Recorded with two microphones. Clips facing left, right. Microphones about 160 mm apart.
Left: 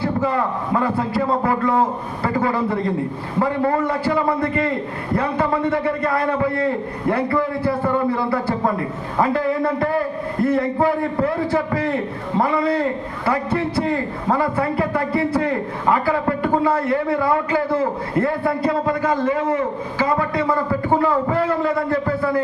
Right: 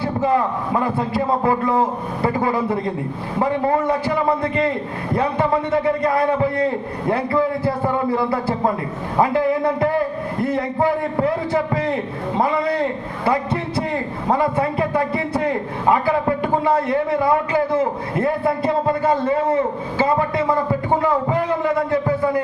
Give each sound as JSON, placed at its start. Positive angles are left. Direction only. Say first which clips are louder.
{"t": 0.0, "sound": "a man's voice", "louder": "right 1 dB", "side_deg": -20}